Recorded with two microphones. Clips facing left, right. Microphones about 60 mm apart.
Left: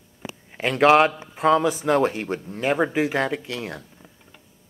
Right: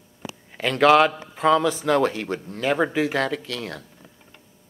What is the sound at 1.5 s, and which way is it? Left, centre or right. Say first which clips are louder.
Speech: even; centre.